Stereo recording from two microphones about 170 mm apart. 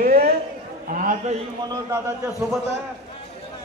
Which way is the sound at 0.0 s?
60° right (ahead or behind).